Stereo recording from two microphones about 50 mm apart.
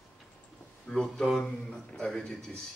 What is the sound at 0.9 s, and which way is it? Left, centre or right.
A man's voice, centre.